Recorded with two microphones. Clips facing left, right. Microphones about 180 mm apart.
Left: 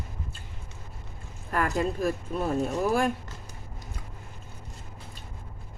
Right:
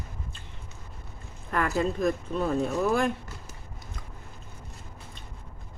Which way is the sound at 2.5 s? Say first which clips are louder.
Even; 45° left (ahead or behind).